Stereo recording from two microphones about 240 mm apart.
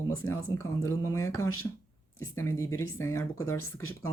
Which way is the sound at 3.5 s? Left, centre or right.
Left.